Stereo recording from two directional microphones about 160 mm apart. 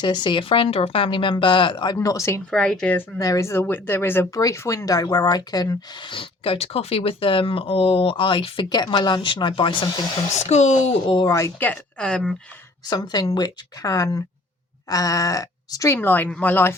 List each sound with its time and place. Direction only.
0.0 s speech: 30° left (ahead or behind)
2.0 s speech: 20° left (ahead or behind)
2.5 s speech: 5° left (ahead or behind)
3.2 s speech: 20° left (ahead or behind)
10.3 s speech: 45° left (ahead or behind)
11.1 s speech: 30° left (ahead or behind)
11.3 s speech: 15° left (ahead or behind)
12.9 s speech: 25° left (ahead or behind)